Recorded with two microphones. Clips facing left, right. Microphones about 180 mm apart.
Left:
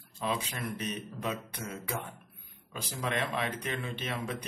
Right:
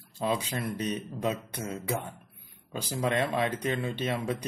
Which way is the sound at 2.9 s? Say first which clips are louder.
Right 5 dB; 35° right (ahead or behind).